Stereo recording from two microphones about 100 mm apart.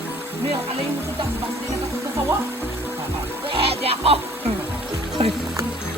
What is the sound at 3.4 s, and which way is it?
Music, 70° right (ahead or behind).